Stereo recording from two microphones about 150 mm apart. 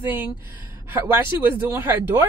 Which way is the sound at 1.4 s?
15° right (ahead or behind).